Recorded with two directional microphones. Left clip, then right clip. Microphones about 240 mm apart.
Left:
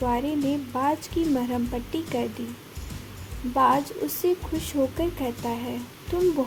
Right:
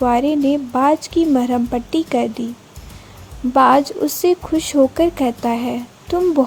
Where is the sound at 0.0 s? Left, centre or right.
Right.